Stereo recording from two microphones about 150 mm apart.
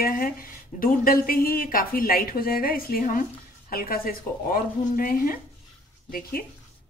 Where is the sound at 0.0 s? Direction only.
70° left (ahead or behind).